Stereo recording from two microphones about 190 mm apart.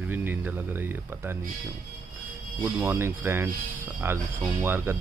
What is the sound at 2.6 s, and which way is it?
Speech, 15° right (ahead or behind).